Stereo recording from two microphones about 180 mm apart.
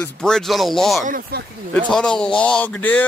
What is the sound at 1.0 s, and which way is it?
Speech, 50° right (ahead or behind).